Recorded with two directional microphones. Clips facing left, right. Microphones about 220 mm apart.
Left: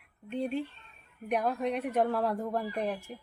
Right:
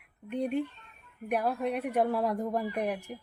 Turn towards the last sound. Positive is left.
turn(degrees=-15)  # may be behind; listen again after turning